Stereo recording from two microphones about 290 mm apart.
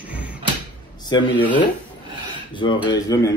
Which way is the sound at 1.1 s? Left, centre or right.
Centre.